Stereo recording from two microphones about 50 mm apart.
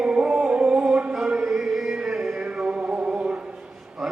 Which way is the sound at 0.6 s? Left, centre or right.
Centre.